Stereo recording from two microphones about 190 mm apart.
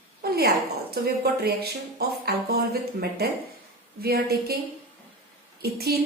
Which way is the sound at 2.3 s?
55° right (ahead or behind).